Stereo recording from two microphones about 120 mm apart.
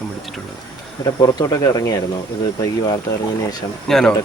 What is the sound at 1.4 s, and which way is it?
Speech, 30° left (ahead or behind).